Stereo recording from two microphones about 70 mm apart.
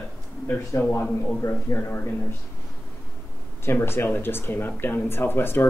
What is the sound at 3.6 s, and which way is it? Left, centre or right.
Speech, left.